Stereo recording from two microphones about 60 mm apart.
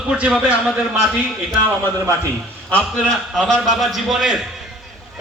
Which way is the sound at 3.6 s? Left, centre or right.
Centre.